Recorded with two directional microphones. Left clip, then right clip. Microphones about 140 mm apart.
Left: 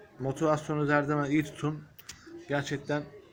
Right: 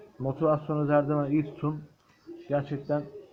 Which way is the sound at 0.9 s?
10° left (ahead or behind).